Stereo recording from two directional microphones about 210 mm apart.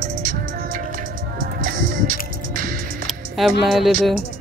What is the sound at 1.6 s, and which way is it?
Music, 40° right (ahead or behind).